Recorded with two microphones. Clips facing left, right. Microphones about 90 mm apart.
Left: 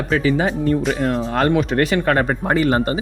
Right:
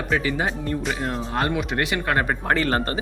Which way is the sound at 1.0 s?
65° left (ahead or behind).